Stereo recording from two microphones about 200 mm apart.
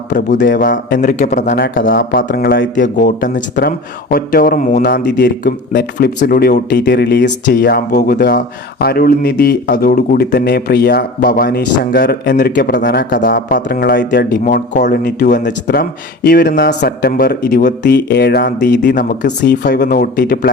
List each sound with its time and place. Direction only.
0.4 s speech: 45° left (ahead or behind)
15.4 s speech: 55° left (ahead or behind)